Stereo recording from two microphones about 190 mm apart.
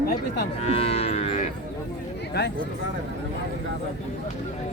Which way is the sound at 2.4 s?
60° left (ahead or behind).